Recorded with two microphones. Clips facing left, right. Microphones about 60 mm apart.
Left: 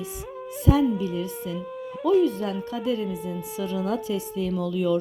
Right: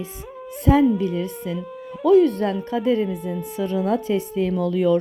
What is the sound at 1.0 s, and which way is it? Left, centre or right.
Speech, right.